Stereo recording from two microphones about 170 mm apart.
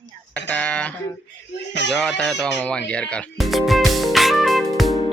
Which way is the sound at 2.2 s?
5° left (ahead or behind).